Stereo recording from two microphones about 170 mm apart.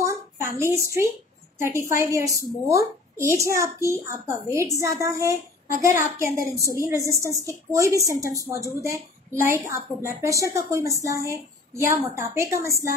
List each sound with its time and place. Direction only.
0.0 s a sound: 15° right (ahead or behind)
1.6 s a woman's voice: 15° right (ahead or behind)
9.4 s a woman's voice: 15° right (ahead or behind)